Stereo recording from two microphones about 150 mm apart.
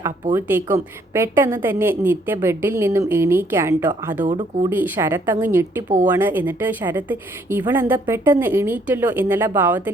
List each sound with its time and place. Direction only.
0.3 s a woman's voice: 15° right (ahead or behind)